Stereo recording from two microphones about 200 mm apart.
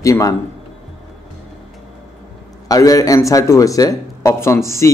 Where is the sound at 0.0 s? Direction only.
15° left (ahead or behind).